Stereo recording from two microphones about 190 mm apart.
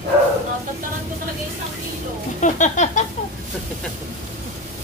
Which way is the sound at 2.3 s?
40° left (ahead or behind).